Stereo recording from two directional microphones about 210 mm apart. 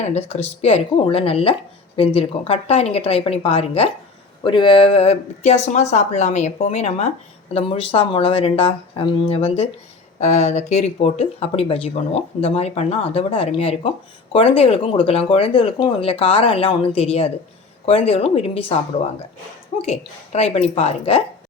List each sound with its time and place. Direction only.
0.0 s speech: 30° left (ahead or behind)
19.8 s speech: 30° left (ahead or behind)